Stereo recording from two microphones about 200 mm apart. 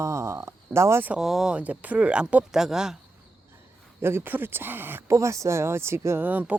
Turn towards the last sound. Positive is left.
turn(degrees=-10)  # may be behind; listen again after turning